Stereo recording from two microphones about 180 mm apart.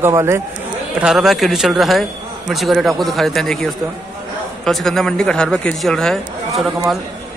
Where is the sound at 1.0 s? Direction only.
Centre (ahead or behind).